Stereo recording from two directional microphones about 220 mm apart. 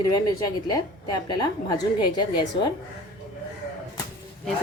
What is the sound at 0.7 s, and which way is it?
Speech, 15° left (ahead or behind).